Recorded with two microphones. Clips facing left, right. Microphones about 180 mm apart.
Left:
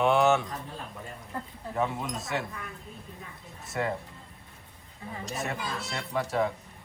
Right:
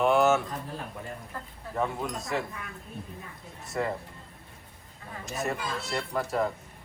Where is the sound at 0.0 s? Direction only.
Centre (ahead or behind).